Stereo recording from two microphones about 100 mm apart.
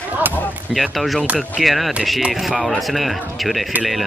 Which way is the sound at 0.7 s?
Centre (ahead or behind).